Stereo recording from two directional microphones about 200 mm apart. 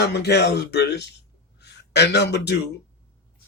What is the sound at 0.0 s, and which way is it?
A man's voice, 55° left (ahead or behind).